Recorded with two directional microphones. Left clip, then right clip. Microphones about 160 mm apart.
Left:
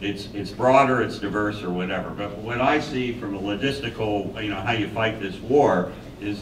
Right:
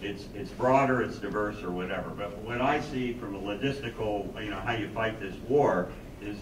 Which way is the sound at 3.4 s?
45° left (ahead or behind).